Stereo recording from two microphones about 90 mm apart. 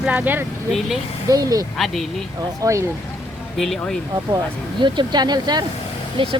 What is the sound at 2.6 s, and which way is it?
Speech, 40° right (ahead or behind).